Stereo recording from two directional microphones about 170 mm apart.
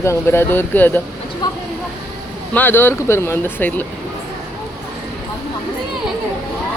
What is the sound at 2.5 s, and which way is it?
Speech, 10° left (ahead or behind).